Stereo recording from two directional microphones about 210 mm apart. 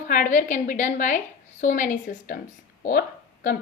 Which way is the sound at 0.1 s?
40° left (ahead or behind).